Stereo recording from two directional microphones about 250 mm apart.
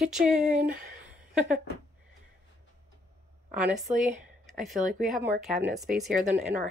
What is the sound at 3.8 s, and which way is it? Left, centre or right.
Speech, right.